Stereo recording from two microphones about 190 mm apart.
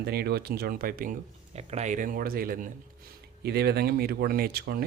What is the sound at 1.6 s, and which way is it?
Speech, 35° right (ahead or behind).